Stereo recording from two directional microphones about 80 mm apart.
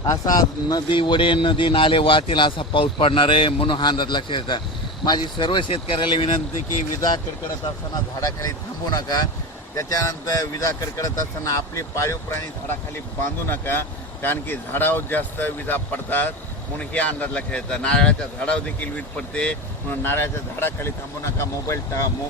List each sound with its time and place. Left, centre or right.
0.0 s speech: left
0.9 s a man's voice: left
8.2 s speech: left
9.7 s speech: left
13.5 s a man's voice: left
20.0 s speech: left
21.3 s speech: left